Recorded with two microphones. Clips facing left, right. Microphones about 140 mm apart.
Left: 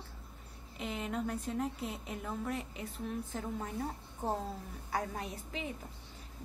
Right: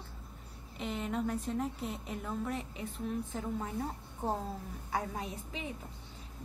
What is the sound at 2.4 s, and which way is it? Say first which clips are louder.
A woman's voice: right 1 dB; 35° right (ahead or behind).